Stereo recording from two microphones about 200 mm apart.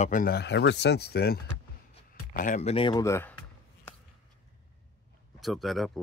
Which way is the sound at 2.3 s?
40° left (ahead or behind).